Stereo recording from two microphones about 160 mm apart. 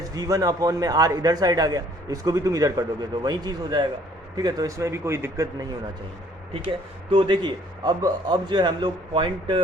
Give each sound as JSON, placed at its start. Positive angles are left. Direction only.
{"t": 0.0, "sound": "a man's voice", "side_deg": -20}
{"t": 6.5, "sound": "a man's voice", "side_deg": -35}